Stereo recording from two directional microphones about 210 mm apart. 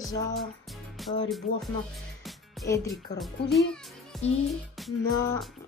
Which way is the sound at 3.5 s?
Centre (ahead or behind).